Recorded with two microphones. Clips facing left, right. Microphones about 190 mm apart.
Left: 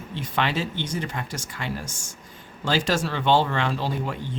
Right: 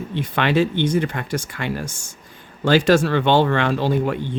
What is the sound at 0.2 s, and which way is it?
Speech, 60° right (ahead or behind).